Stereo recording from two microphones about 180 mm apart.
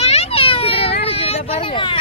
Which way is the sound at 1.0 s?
35° left (ahead or behind).